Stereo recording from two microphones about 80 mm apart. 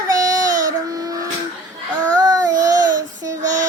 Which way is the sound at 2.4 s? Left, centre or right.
Right.